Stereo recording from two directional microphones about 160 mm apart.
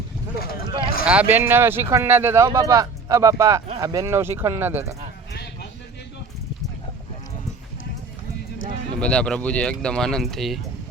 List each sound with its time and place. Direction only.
1.0 s speech: 10° right (ahead or behind)
9.0 s speech: 5° left (ahead or behind)